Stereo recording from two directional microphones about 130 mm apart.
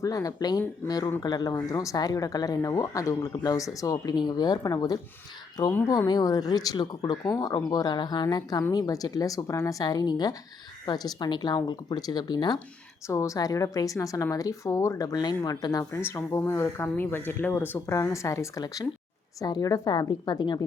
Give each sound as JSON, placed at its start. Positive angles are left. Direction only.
{"t": 0.0, "sound": "speech", "side_deg": 25}
{"t": 13.1, "sound": "speech", "side_deg": 25}